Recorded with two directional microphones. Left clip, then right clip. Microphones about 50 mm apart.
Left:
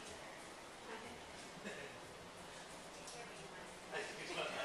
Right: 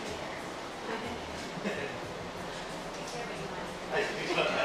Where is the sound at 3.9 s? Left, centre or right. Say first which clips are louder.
Right 14 dB; left.